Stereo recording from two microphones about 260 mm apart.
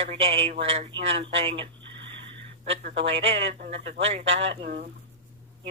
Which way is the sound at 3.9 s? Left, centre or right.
Right.